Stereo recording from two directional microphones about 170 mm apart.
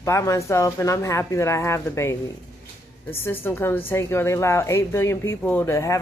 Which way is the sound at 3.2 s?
10° left (ahead or behind).